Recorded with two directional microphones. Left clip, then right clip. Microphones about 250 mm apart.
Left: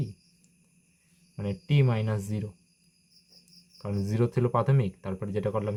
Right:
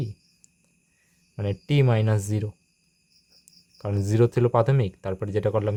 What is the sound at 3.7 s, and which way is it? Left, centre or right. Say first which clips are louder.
Speech: right 7 dB; right.